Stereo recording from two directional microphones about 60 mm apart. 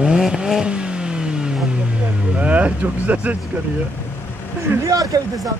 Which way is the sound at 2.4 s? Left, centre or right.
Right.